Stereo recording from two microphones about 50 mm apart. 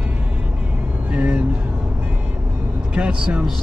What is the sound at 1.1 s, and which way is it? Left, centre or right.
Vehicle, right.